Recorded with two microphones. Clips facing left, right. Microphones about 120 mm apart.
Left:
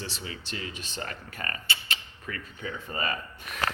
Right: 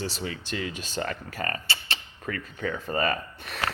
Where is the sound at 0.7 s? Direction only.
40° right (ahead or behind).